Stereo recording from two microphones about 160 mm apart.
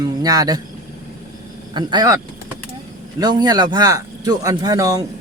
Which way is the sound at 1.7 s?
25° right (ahead or behind).